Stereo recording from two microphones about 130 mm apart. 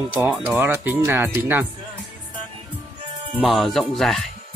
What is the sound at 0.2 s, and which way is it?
Speech, 20° right (ahead or behind).